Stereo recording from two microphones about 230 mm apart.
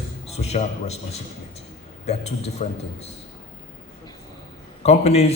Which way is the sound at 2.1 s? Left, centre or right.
Left.